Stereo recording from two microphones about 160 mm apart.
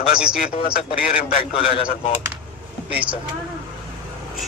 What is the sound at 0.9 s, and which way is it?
Speech, 60° left (ahead or behind).